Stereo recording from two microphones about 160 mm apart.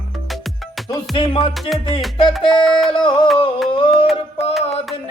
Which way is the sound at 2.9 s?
30° left (ahead or behind).